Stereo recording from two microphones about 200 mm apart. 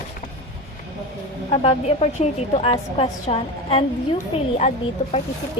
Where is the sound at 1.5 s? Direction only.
30° left (ahead or behind).